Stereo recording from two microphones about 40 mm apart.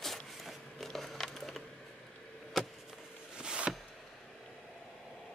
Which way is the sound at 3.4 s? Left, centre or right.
Right.